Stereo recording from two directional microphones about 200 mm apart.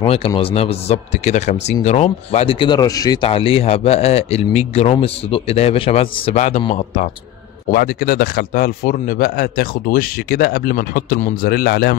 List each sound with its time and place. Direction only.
0.0 s speech: 30° left (ahead or behind)
7.7 s speech: 50° left (ahead or behind)